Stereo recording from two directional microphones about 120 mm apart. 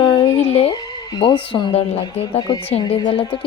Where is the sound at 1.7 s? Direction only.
60° left (ahead or behind).